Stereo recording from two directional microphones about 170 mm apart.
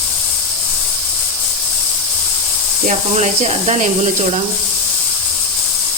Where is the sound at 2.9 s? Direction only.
45° right (ahead or behind).